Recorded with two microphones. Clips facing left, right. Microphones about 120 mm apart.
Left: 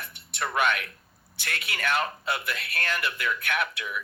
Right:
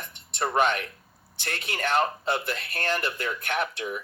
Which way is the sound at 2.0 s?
30° right (ahead or behind).